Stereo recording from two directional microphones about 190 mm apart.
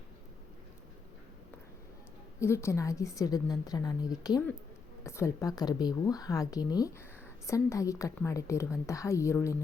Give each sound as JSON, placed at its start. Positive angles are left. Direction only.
{"t": 2.4, "sound": "a woman's voice", "side_deg": 15}